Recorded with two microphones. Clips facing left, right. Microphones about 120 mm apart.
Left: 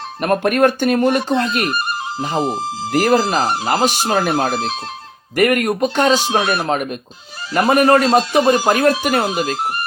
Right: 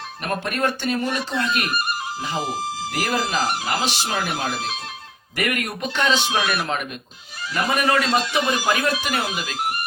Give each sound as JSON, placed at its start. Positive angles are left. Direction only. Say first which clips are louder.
{"t": 0.2, "sound": "speech", "louder": "left 10 dB", "side_deg": 55}
{"t": 1.4, "sound": "speech", "louder": "left 5 dB", "side_deg": 40}
{"t": 2.9, "sound": "speech", "louder": "left 10 dB", "side_deg": 45}
{"t": 3.8, "sound": "speech", "louder": "left 8 dB", "side_deg": 45}
{"t": 7.5, "sound": "speech", "louder": "left 8 dB", "side_deg": 50}
{"t": 8.0, "sound": "speech", "louder": "left 8 dB", "side_deg": 35}